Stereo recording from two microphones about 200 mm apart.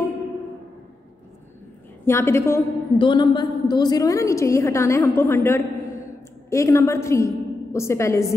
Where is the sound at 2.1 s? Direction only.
15° left (ahead or behind).